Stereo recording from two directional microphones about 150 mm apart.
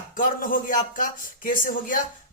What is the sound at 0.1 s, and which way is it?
Speech, 65° left (ahead or behind).